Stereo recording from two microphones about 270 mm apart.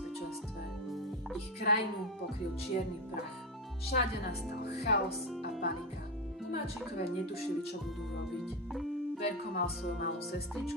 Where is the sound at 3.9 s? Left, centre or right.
Left.